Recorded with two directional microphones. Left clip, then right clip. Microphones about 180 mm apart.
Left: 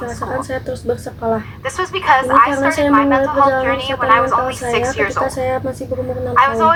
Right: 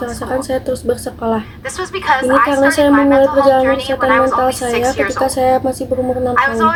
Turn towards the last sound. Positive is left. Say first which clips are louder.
# left 1 dB
turn(degrees=-25)  # may be behind; listen again after turning